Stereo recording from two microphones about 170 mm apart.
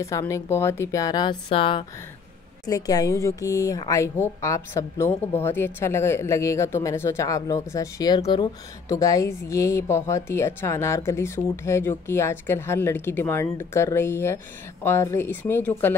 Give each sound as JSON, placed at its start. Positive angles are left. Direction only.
{"t": 0.0, "sound": "a woman's voice", "side_deg": 15}
{"t": 2.6, "sound": "a woman's voice", "side_deg": 20}